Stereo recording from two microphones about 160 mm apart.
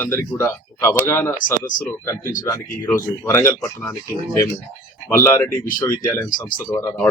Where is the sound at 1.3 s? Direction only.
55° left (ahead or behind).